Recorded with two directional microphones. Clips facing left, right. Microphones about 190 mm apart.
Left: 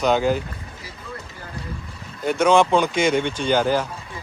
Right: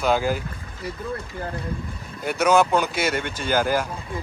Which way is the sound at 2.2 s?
5° right (ahead or behind).